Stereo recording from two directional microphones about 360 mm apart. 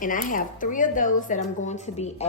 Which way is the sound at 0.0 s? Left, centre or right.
Left.